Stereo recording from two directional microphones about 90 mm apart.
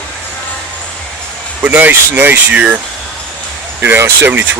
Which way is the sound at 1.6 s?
20° right (ahead or behind).